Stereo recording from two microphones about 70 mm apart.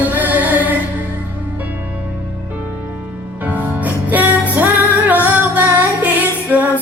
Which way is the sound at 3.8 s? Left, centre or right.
Right.